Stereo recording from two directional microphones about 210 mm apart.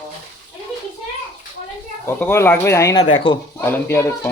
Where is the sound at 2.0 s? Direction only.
10° left (ahead or behind).